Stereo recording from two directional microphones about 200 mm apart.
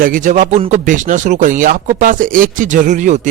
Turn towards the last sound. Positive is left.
turn(degrees=-40)  # may be behind; listen again after turning